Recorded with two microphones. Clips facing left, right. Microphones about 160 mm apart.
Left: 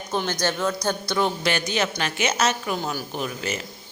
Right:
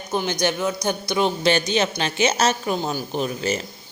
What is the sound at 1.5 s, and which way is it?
A woman's voice, 25° right (ahead or behind).